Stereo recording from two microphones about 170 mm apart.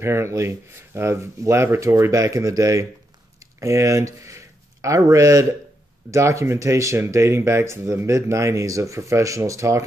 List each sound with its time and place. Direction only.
0.0 s speech: 15° right (ahead or behind)